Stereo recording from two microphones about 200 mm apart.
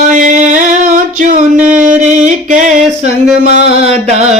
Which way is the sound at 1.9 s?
40° right (ahead or behind).